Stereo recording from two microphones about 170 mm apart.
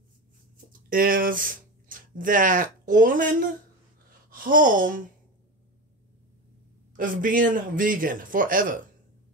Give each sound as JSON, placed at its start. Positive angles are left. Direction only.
{"t": 0.8, "sound": "speech", "side_deg": -55}
{"t": 4.3, "sound": "a sound", "side_deg": -55}
{"t": 7.0, "sound": "speech", "side_deg": -50}